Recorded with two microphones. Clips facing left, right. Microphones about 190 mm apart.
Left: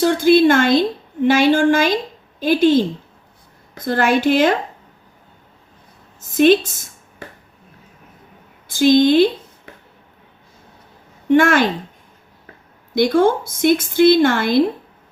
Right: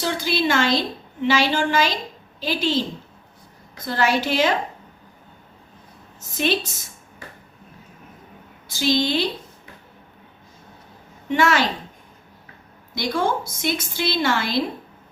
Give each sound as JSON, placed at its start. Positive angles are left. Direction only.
{"t": 0.0, "sound": "a woman's voice", "side_deg": 50}
{"t": 6.1, "sound": "a woman's voice", "side_deg": 50}
{"t": 8.6, "sound": "a woman's voice", "side_deg": 50}
{"t": 11.3, "sound": "a woman's voice", "side_deg": 50}
{"t": 12.9, "sound": "a woman's voice", "side_deg": 55}